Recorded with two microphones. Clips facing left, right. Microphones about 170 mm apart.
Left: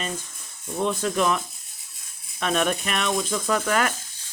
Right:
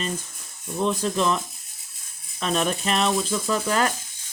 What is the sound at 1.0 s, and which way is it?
Speech, 30° right (ahead or behind).